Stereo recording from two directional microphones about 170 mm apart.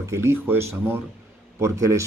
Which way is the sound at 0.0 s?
15° right (ahead or behind).